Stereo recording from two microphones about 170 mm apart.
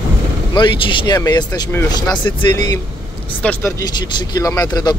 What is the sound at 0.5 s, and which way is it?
Speech, 30° left (ahead or behind).